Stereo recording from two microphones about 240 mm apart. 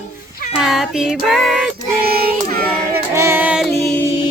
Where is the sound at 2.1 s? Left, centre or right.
Right.